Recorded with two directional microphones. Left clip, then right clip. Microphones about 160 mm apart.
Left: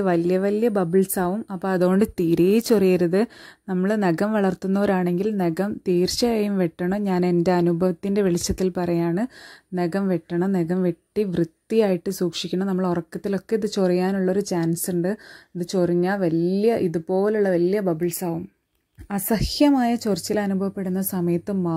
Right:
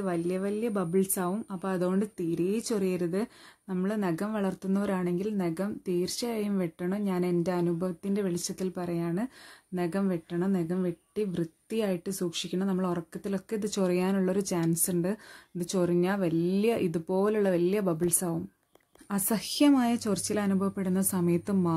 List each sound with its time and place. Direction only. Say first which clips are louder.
0.0 s speech: left 10 dB; 50° left (ahead or behind); by 18.0 s 20° left (ahead or behind)
18.0 s a woman's voice: left 5 dB; 10° left (ahead or behind)
19.0 s speech: left 7 dB; 20° left (ahead or behind)